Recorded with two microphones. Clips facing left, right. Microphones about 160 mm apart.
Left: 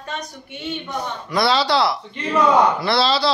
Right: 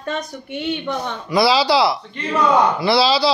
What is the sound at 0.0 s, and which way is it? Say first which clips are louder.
Speech: right 5 dB; 60° right (ahead or behind).